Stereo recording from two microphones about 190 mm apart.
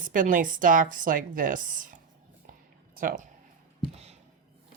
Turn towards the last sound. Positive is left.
turn(degrees=-45)  # may be behind; listen again after turning